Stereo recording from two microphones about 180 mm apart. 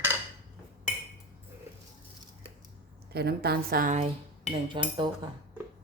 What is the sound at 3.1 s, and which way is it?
Speech, 60° right (ahead or behind).